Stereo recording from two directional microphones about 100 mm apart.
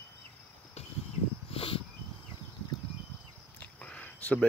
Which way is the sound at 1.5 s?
65° left (ahead or behind).